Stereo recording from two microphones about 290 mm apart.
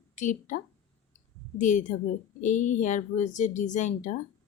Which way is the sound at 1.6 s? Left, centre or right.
Left.